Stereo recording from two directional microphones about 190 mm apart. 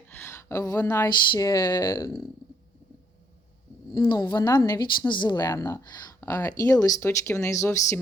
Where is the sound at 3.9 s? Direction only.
20° left (ahead or behind).